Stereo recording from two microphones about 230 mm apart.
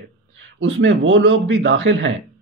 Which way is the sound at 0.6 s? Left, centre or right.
Right.